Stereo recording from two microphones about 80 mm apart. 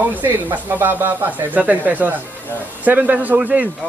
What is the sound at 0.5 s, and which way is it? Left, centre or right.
Speech, right.